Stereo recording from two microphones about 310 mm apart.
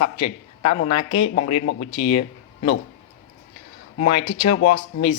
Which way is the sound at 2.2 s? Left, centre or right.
Left.